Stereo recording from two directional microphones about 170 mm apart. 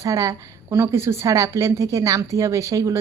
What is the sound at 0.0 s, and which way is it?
Speech, 20° right (ahead or behind).